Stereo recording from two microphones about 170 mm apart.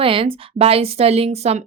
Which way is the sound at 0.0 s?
30° right (ahead or behind).